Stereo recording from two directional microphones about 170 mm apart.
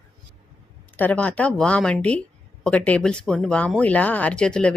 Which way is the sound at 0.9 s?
10° left (ahead or behind).